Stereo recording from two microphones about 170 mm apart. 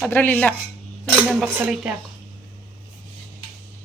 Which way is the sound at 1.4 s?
15° right (ahead or behind).